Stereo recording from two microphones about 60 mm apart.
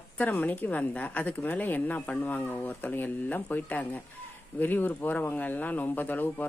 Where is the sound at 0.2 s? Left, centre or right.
Left.